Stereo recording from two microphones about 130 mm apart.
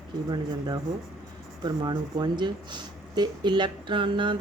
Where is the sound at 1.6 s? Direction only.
30° right (ahead or behind).